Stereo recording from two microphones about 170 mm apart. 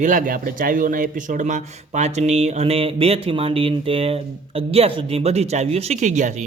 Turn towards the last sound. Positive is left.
turn(degrees=-45)  # may be behind; listen again after turning